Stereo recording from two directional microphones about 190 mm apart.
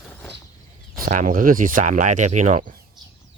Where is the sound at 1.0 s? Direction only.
40° right (ahead or behind).